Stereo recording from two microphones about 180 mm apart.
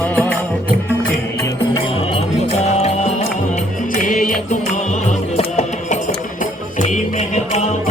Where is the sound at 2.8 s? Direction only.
35° left (ahead or behind).